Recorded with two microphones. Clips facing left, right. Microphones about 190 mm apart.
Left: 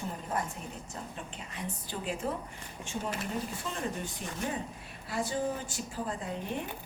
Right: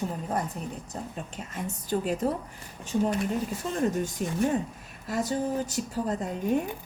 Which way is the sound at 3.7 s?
45° right (ahead or behind).